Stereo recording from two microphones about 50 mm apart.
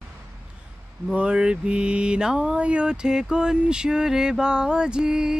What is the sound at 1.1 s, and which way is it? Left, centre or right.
Mantra, right.